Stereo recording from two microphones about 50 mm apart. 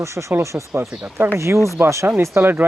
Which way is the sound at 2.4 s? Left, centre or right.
Right.